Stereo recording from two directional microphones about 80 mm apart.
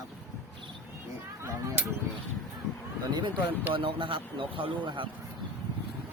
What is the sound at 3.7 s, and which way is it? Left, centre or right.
Speech, right.